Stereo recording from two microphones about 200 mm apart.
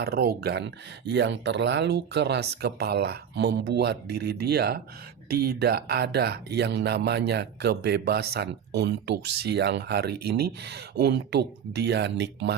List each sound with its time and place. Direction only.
0.0 s speech: 55° right (ahead or behind)